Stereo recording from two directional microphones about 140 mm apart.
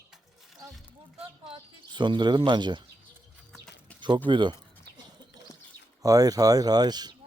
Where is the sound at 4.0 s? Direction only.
35° right (ahead or behind).